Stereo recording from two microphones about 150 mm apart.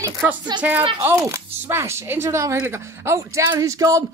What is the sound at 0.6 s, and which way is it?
Speech, 10° right (ahead or behind).